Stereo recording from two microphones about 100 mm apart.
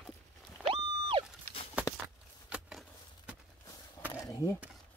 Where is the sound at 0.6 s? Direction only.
65° right (ahead or behind).